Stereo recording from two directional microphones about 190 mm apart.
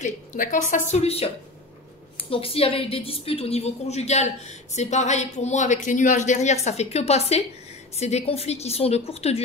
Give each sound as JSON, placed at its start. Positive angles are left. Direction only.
{"t": 0.0, "sound": "a woman's voice", "side_deg": 40}